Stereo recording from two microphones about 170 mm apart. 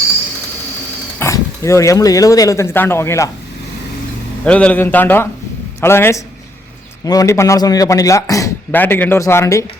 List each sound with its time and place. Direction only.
1.2 s speech: 15° left (ahead or behind)
4.4 s a man's voice: 5° left (ahead or behind)